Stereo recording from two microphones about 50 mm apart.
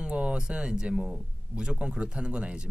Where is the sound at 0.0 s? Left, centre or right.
Right.